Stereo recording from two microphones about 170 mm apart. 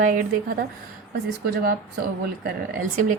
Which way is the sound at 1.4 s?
65° right (ahead or behind).